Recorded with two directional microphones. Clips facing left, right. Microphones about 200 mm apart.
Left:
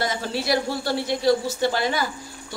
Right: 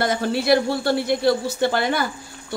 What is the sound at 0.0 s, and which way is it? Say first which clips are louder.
Speech: right 5 dB; 55° right (ahead or behind).